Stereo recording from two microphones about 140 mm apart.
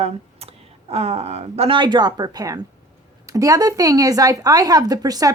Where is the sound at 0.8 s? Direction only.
45° right (ahead or behind).